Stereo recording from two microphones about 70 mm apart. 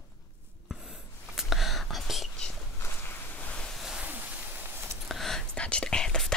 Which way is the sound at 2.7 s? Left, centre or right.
Left.